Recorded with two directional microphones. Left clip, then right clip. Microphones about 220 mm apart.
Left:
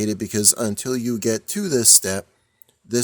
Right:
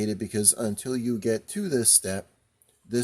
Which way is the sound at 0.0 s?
30° left (ahead or behind).